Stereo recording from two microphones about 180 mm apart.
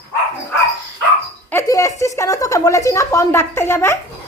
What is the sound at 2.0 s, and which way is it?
Speech, 15° left (ahead or behind).